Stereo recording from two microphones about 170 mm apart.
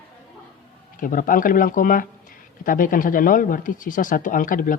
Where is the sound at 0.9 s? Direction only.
50° left (ahead or behind).